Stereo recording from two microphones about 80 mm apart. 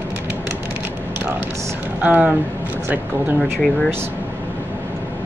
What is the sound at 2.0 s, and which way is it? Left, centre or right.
Speech, right.